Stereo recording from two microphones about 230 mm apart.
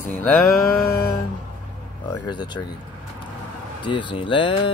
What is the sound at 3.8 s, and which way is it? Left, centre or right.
Speech, left.